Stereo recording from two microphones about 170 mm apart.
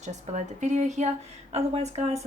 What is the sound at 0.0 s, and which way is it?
A woman's voice, 45° right (ahead or behind).